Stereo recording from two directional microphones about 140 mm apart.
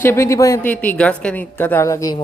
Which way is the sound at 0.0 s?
20° left (ahead or behind).